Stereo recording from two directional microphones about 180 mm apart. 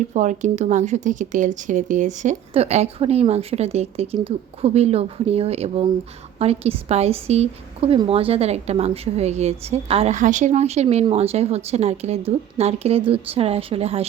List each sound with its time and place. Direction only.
0.1 s speech: 40° right (ahead or behind)